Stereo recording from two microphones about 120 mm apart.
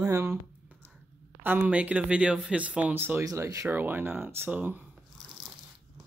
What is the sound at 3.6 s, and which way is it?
Speech, 15° right (ahead or behind).